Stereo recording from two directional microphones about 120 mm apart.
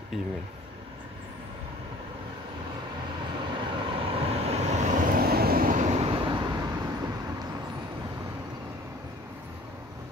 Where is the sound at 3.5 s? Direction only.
45° right (ahead or behind); by 6.0 s 90° right.